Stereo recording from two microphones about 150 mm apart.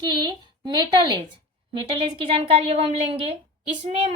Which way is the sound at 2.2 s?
35° right (ahead or behind).